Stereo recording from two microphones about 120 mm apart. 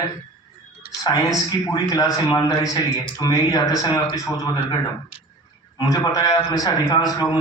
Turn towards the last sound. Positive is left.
turn(degrees=30)  # may be behind; listen again after turning